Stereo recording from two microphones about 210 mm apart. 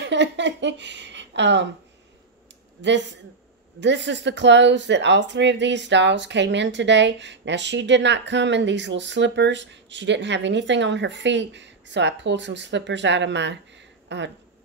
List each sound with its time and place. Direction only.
0.0 s speech: 60° right (ahead or behind)
2.8 s speech: 55° right (ahead or behind)